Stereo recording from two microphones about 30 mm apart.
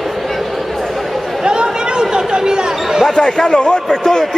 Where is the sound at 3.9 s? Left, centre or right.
Left.